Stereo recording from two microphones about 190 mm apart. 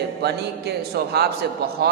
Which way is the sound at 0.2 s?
60° right (ahead or behind).